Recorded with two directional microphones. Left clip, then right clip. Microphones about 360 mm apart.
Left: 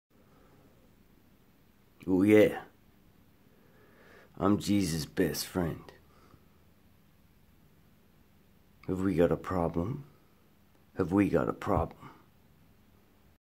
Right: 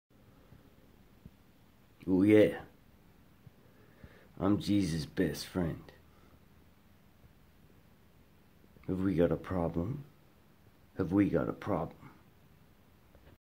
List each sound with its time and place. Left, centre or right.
2.0 s speech: centre
4.1 s speech: centre
8.8 s speech: centre
11.0 s speech: centre